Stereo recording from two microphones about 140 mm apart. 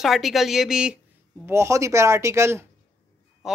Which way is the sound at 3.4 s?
Centre (ahead or behind).